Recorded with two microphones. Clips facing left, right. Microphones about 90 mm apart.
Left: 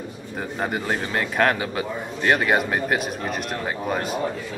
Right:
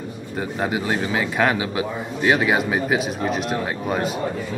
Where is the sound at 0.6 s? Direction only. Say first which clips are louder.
Right 2 dB; centre (ahead or behind).